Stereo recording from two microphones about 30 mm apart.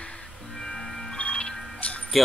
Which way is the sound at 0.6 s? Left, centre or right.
Left.